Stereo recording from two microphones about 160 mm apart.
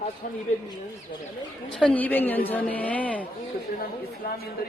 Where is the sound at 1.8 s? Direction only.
10° left (ahead or behind).